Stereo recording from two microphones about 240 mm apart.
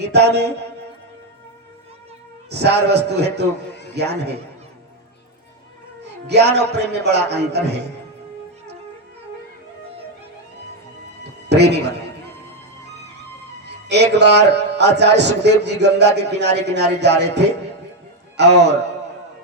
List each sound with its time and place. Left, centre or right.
0.1 s a man's voice: right
2.5 s a man's voice: right
6.2 s a man's voice: right
11.2 s music: right
13.8 s a man's voice: right